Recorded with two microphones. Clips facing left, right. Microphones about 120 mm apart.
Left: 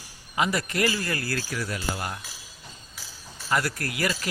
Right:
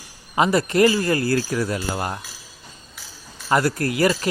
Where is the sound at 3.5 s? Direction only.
30° right (ahead or behind).